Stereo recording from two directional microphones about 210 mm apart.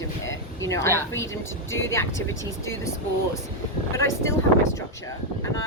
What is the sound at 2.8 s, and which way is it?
A woman's voice, 15° left (ahead or behind).